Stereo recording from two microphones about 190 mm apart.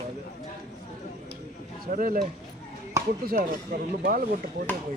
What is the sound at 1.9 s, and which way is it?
Speech, 45° right (ahead or behind).